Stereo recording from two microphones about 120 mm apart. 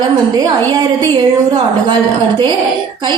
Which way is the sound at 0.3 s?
35° right (ahead or behind).